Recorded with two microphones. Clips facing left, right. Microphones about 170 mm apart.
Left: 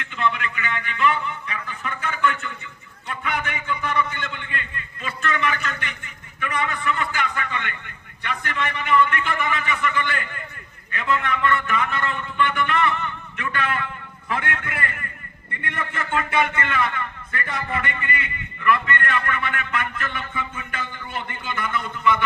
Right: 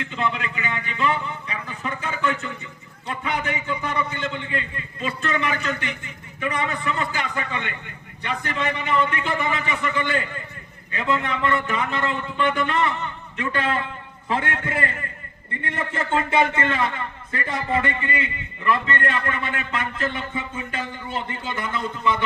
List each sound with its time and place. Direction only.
0.0 s a sound: 25° right (ahead or behind)
3.1 s a man's voice: 30° right (ahead or behind)
21.6 s speech: 30° right (ahead or behind)